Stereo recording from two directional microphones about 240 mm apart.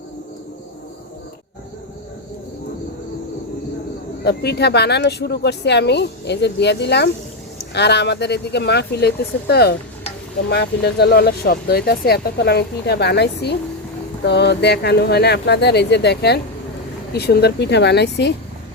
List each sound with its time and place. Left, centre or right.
4.2 s speech: left